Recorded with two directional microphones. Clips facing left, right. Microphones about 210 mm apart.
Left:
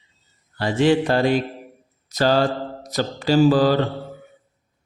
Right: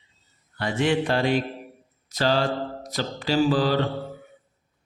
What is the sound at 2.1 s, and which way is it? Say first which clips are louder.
Mantra: left 4 dB; 45° left (ahead or behind).